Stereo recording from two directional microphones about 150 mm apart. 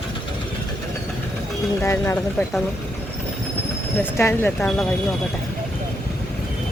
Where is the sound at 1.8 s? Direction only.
15° left (ahead or behind).